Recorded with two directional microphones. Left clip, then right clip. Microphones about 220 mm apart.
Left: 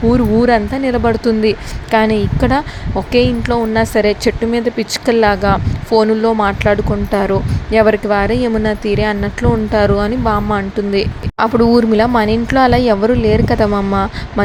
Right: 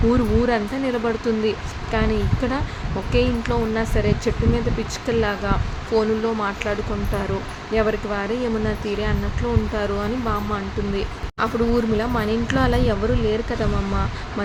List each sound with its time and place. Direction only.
0.1 s speech: 25° left (ahead or behind)